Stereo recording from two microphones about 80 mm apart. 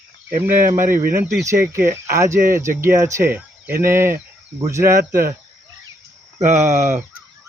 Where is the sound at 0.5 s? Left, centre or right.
Right.